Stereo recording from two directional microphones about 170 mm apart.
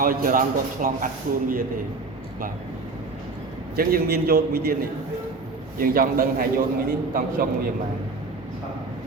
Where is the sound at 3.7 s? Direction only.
65° right (ahead or behind).